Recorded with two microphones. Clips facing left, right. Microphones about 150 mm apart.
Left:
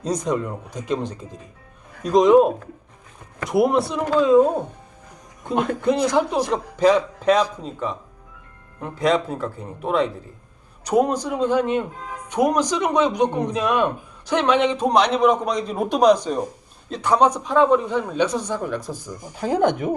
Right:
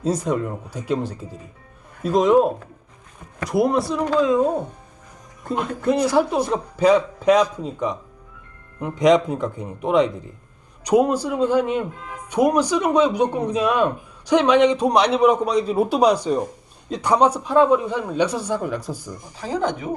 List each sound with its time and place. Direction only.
0.0 s a man's voice: 5° right (ahead or behind)
3.5 s speech: centre (ahead or behind)
5.5 s a man's voice: centre (ahead or behind)
19.4 s speech: 55° left (ahead or behind)